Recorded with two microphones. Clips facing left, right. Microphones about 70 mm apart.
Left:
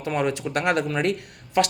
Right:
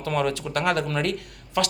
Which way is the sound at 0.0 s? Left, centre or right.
Left.